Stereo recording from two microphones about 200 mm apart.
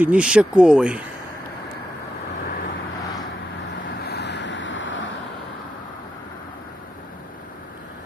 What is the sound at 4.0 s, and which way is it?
Waves, 55° left (ahead or behind).